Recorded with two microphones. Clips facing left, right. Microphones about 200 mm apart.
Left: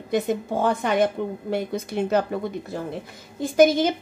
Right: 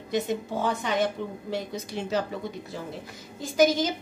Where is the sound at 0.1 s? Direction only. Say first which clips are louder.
Left 4 dB; 55° left (ahead or behind).